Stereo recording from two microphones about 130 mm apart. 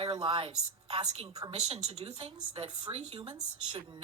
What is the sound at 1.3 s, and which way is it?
Speech, 35° right (ahead or behind).